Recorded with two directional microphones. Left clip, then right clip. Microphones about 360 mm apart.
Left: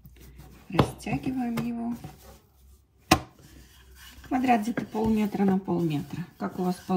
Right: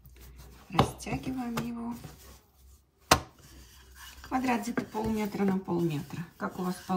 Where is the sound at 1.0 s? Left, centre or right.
Centre.